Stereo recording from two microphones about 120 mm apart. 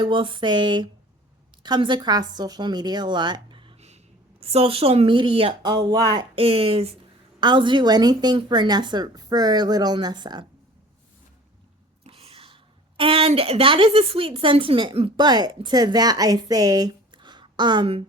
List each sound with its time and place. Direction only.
0.0 s a woman's voice: 45° right (ahead or behind)
3.8 s speech: 65° right (ahead or behind)
5.7 s a woman's voice: 35° right (ahead or behind)
6.3 s a woman's voice: 55° right (ahead or behind)
7.3 s a woman's voice: 40° right (ahead or behind)
12.0 s a sound: 55° right (ahead or behind)
13.0 s a woman's voice: 50° right (ahead or behind)